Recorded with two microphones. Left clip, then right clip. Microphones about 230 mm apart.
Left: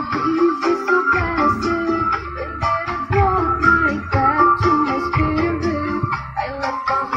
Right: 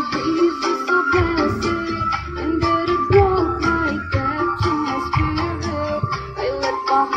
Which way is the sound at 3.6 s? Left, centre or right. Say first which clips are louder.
Left 5 dB; left.